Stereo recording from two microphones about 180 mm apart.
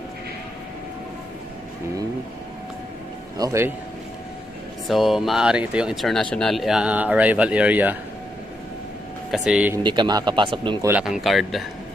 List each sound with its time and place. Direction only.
3.3 s speech: 15° right (ahead or behind)
4.8 s speech: centre (ahead or behind)
9.3 s speech: 5° right (ahead or behind)
9.8 s a man's voice: 25° right (ahead or behind)
10.9 s speech: 5° right (ahead or behind)